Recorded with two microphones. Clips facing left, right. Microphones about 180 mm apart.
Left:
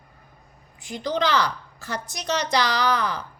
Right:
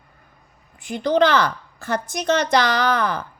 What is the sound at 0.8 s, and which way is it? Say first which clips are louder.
A woman's voice: right 7 dB; 60° right (ahead or behind).